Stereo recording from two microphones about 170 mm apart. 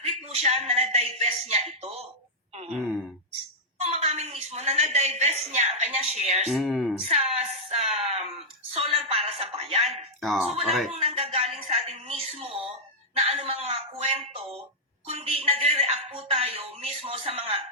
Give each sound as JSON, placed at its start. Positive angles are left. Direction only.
{"t": 0.3, "sound": "a woman's voice", "side_deg": -40}
{"t": 2.6, "sound": "speech", "side_deg": -5}
{"t": 3.8, "sound": "a woman's voice", "side_deg": -40}
{"t": 6.5, "sound": "speech", "side_deg": 0}
{"t": 7.1, "sound": "a sound", "side_deg": -40}
{"t": 10.2, "sound": "speech", "side_deg": 0}
{"t": 11.1, "sound": "a sound", "side_deg": -35}